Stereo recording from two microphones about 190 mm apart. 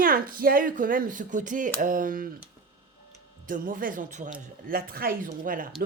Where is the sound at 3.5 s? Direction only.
45° right (ahead or behind).